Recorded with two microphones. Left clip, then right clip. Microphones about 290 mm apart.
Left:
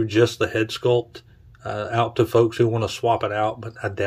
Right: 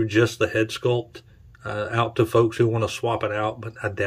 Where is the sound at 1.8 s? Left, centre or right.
Centre.